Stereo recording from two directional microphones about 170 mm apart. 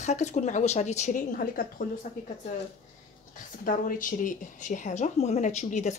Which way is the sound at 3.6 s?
55° left (ahead or behind).